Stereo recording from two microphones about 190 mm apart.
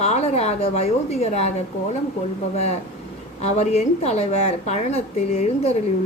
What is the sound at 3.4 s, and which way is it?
A woman's voice, 35° left (ahead or behind).